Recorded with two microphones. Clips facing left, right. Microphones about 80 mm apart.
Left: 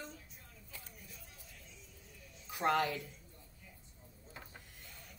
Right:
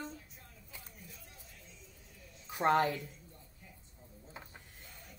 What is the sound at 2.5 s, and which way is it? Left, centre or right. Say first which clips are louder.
Speech: right 4 dB; right.